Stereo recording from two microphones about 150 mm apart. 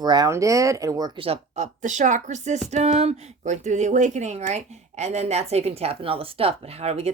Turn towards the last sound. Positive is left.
turn(degrees=-45)  # may be behind; listen again after turning